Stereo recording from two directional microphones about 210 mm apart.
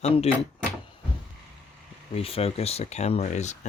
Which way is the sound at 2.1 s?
30° left (ahead or behind).